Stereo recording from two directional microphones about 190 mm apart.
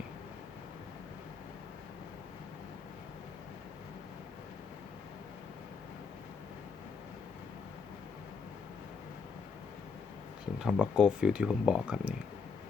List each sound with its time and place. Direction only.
10.6 s speech: 5° right (ahead or behind)